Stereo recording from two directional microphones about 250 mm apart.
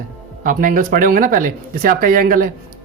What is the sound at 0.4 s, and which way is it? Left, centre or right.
A woman's voice, right.